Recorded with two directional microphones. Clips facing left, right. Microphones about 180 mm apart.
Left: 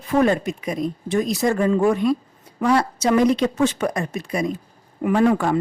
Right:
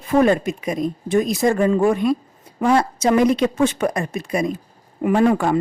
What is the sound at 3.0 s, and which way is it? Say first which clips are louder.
Speech: right 1 dB; 50° right (ahead or behind).